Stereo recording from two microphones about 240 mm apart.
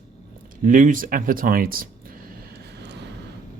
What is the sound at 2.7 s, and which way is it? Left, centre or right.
Vehicle, right.